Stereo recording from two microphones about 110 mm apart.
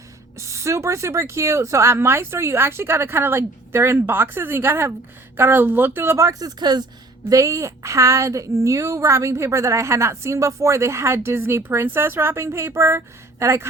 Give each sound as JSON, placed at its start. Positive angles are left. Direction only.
{"t": 0.3, "sound": "a woman's voice", "side_deg": -25}
{"t": 6.6, "sound": "speech", "side_deg": -40}
{"t": 7.3, "sound": "a woman's voice", "side_deg": -30}